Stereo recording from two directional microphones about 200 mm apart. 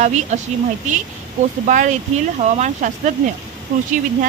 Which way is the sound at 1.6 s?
40° right (ahead or behind).